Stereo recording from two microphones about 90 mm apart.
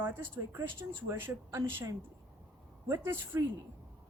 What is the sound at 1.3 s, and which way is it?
Speech, 35° right (ahead or behind).